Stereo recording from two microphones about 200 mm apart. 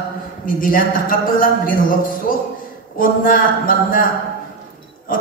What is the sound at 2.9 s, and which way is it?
Speech, 45° left (ahead or behind).